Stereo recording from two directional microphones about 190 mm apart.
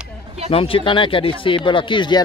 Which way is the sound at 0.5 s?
30° left (ahead or behind).